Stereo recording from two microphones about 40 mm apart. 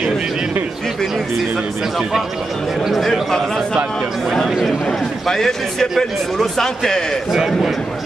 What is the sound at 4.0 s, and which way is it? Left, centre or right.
Speech, centre.